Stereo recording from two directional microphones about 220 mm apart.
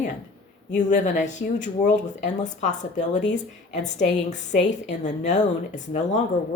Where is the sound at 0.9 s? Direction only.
35° left (ahead or behind).